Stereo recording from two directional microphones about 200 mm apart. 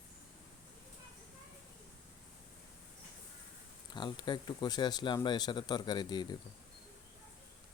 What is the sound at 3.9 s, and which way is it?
Speech, 25° left (ahead or behind).